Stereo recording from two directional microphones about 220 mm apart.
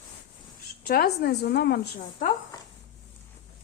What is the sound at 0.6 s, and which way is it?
A woman's voice, 45° left (ahead or behind).